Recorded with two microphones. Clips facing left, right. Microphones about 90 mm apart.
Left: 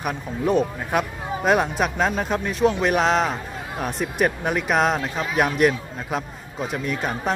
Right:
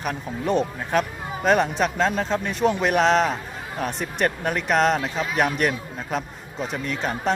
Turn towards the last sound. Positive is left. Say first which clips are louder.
# even
turn(degrees=5)  # may be behind; listen again after turning